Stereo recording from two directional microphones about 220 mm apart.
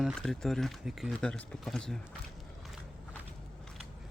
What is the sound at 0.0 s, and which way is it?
Speech, centre (ahead or behind).